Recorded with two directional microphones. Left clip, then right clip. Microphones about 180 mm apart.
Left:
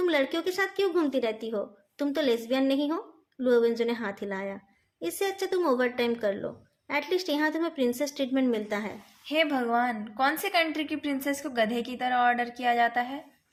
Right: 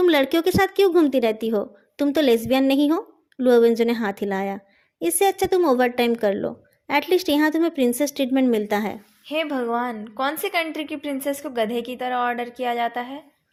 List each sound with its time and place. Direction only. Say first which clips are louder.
0.0 s a woman's voice: right 8 dB; 50° right (ahead or behind)
9.2 s a woman's voice: right 2 dB; 35° right (ahead or behind)